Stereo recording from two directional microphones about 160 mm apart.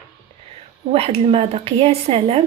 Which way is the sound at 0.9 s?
40° right (ahead or behind).